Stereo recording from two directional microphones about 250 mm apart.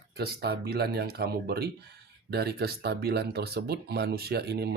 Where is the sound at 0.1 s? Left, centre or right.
Right.